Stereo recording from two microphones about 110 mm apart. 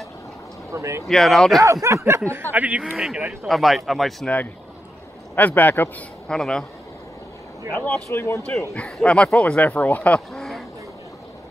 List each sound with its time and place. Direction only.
0.7 s speech: 25° right (ahead or behind)
1.0 s speech: centre (ahead or behind)
1.6 s speech: 25° right (ahead or behind)
2.5 s speech: 15° right (ahead or behind)
2.8 s speech: 5° right (ahead or behind)
5.3 s speech: 15° left (ahead or behind)
6.2 s speech: 5° left (ahead or behind)
7.7 s speech: 15° left (ahead or behind)
8.1 s speech: 25° left (ahead or behind)
8.7 s speech: 10° left (ahead or behind)